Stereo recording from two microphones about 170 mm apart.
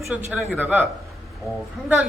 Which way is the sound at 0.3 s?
5° right (ahead or behind).